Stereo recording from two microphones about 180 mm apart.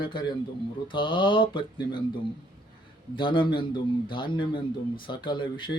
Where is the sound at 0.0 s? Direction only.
25° left (ahead or behind).